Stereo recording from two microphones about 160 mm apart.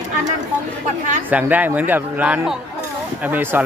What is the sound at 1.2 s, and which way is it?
A man's voice, 10° right (ahead or behind).